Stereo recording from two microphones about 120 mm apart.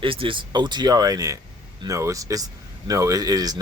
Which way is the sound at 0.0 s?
50° right (ahead or behind).